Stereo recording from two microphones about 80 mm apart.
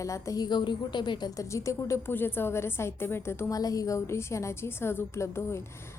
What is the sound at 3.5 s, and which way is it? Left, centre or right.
A woman's voice, left.